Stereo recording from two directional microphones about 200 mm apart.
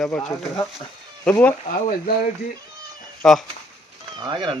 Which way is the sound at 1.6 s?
45° left (ahead or behind).